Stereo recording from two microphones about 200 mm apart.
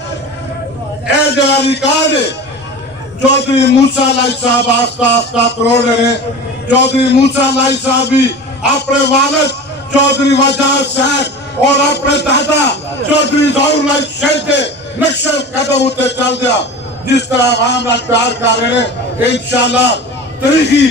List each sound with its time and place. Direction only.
1.1 s a man's voice: 55° left (ahead or behind)